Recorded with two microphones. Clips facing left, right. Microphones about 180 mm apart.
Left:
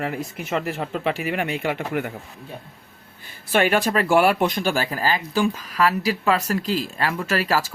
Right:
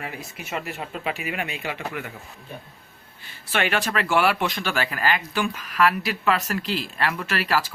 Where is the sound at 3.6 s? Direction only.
40° left (ahead or behind).